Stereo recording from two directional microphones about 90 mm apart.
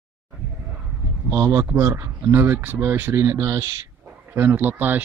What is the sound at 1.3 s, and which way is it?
Speech, 45° right (ahead or behind).